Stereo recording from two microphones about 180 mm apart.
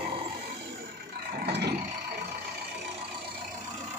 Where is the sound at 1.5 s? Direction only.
65° right (ahead or behind).